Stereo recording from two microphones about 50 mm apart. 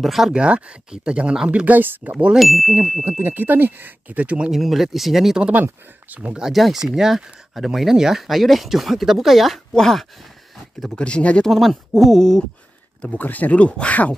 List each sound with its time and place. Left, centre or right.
0.0 s speech: centre
0.3 s speech: right
2.3 s speech: centre
2.8 s ding: centre
3.1 s speech: right
3.3 s speech: right
4.1 s speech: right
4.5 s speech: centre
5.5 s speech: right
6.5 s speech: centre
11.0 s speech: left
11.4 s speech: centre
13.1 s speech: left